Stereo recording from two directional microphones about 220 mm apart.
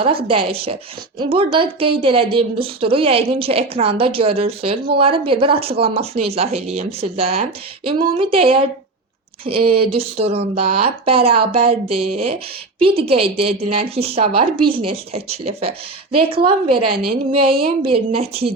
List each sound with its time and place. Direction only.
0.3 s a woman's voice: 25° right (ahead or behind)